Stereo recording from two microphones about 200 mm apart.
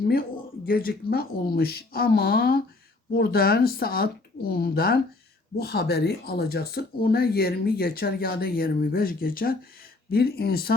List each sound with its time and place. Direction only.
0.1 s speech: 45° left (ahead or behind)